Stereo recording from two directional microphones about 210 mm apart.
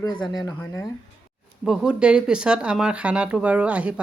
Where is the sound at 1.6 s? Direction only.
5° right (ahead or behind).